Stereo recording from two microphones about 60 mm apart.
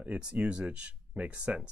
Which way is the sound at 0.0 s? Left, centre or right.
Right.